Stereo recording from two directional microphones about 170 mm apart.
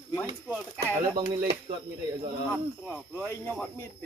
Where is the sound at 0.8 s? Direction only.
30° right (ahead or behind).